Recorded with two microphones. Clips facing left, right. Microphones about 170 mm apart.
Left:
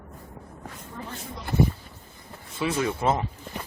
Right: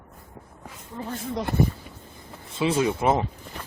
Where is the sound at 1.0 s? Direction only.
30° right (ahead or behind).